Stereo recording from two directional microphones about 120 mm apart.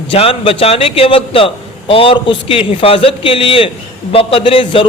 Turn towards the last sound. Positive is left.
turn(degrees=50)  # may be behind; listen again after turning